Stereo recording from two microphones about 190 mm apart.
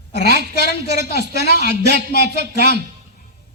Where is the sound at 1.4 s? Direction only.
60° right (ahead or behind).